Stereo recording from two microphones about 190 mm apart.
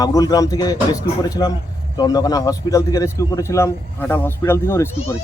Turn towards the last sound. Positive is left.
turn(degrees=15)  # may be behind; listen again after turning